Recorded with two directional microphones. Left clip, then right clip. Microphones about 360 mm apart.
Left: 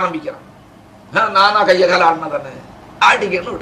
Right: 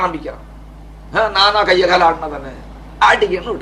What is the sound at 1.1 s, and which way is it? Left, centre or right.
A man's voice, right.